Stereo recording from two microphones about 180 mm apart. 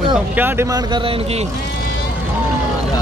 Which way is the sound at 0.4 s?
10° right (ahead or behind).